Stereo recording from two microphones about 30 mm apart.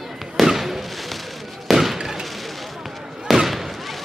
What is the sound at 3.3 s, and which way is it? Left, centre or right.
Fireworks, centre.